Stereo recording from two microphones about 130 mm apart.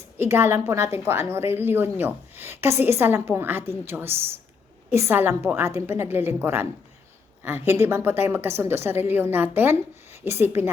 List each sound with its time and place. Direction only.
0.2 s a woman's voice: 20° right (ahead or behind)